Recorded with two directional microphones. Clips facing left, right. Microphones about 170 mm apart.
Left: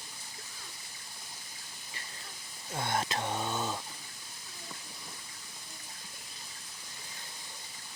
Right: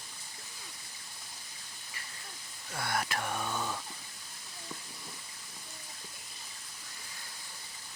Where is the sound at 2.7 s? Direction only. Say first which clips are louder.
Left 2 dB; 25° left (ahead or behind).